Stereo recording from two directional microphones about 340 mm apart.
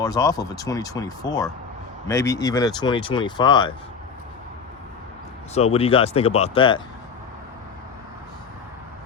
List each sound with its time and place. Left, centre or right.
0.0 s speech: centre
5.5 s speech: centre